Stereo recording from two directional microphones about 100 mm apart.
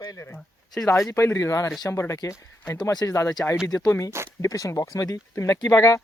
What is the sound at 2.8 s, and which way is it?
Speech, 40° left (ahead or behind).